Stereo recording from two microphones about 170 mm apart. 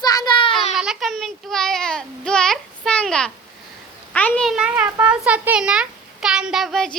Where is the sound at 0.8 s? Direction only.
Centre (ahead or behind).